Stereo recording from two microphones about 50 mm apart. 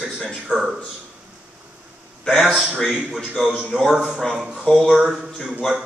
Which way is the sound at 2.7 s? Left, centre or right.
Centre.